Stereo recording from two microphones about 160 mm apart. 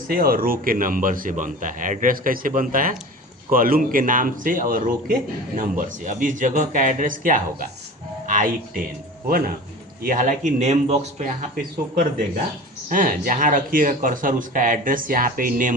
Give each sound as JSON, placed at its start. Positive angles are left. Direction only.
{"t": 0.1, "sound": "speech", "side_deg": -65}
{"t": 10.0, "sound": "speech", "side_deg": -55}
{"t": 11.5, "sound": "speech", "side_deg": -60}